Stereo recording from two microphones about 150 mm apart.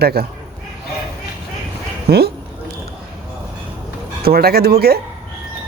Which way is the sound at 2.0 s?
90° right.